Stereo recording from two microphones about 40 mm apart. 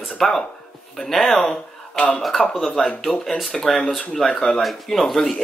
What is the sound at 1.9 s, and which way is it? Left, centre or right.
Speech, left.